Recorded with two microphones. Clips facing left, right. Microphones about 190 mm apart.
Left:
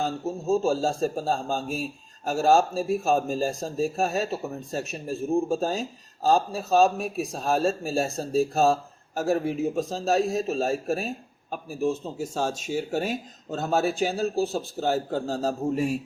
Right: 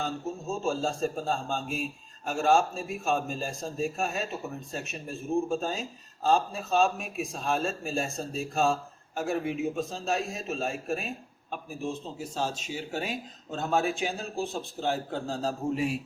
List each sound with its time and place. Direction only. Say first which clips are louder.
0.6 s speech: left 5 dB; 35° left (ahead or behind)